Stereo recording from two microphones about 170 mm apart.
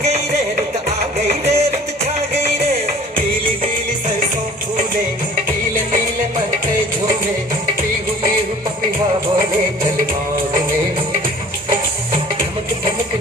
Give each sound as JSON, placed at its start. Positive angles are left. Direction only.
{"t": 0.9, "sound": "music", "side_deg": -40}